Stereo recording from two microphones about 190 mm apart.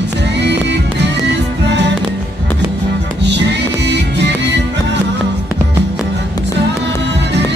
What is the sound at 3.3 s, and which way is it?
Music, 65° right (ahead or behind).